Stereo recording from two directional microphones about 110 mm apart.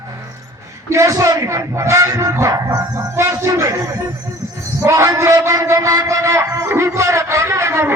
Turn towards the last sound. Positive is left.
turn(degrees=-25)  # may be behind; listen again after turning